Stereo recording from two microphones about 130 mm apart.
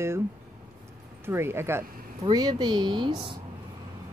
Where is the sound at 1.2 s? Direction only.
20° right (ahead or behind).